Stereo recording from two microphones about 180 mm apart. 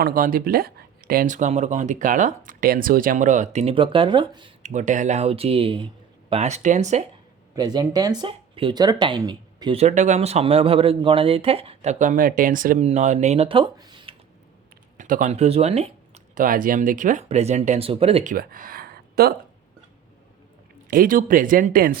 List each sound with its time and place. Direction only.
0.0 s speech: 55° right (ahead or behind); by 4.5 s 25° right (ahead or behind)
4.6 s speech: 40° right (ahead or behind)
7.5 s speech: 20° right (ahead or behind)
9.8 s speech: 40° right (ahead or behind)
14.9 s speech: 45° right (ahead or behind)
20.9 s speech: 50° right (ahead or behind)